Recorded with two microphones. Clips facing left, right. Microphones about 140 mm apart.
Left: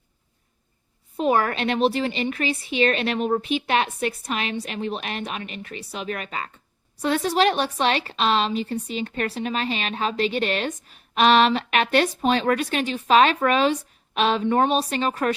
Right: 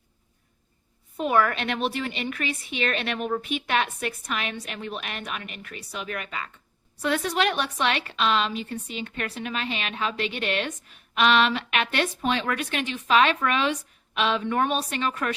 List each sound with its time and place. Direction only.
1.1 s a woman's voice: 35° left (ahead or behind)
14.4 s a woman's voice: 25° left (ahead or behind)